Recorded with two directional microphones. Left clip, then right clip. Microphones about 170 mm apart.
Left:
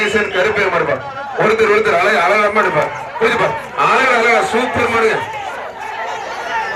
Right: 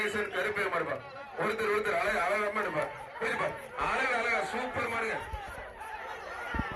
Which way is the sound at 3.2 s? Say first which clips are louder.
Left 18 dB; 45° left (ahead or behind).